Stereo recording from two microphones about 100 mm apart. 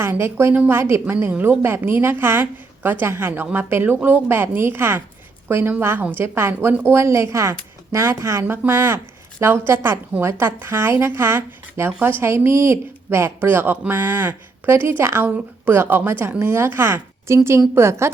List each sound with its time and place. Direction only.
0.0 s a woman's voice: 25° right (ahead or behind)